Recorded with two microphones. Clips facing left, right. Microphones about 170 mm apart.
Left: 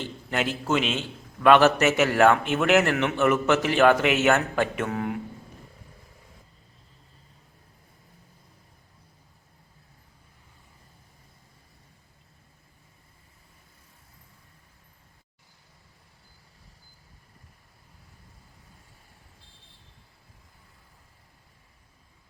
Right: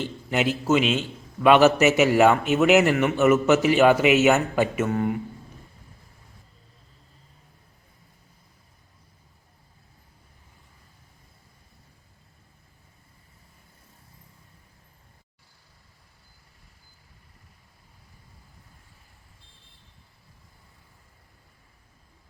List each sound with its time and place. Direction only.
0.3 s a man's voice: 10° right (ahead or behind)